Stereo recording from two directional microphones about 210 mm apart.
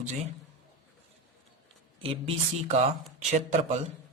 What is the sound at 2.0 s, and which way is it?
A man's voice, 25° right (ahead or behind).